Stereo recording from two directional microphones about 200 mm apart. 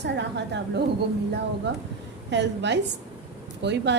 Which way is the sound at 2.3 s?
60° right (ahead or behind).